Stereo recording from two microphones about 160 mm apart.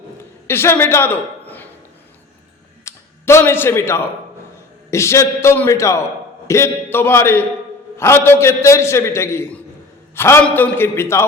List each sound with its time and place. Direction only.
0.4 s a man's voice: 15° left (ahead or behind)
2.8 s a man's voice: 15° left (ahead or behind)